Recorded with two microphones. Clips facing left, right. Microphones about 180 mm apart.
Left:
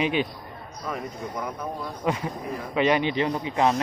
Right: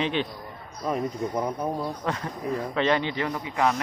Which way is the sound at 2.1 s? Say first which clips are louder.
Left 5 dB; 10° left (ahead or behind).